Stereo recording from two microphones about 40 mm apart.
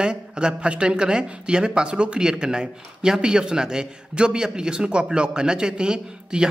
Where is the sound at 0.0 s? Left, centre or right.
Right.